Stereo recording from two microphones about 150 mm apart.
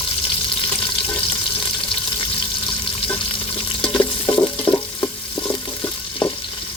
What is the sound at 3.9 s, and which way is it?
Stir, 30° left (ahead or behind).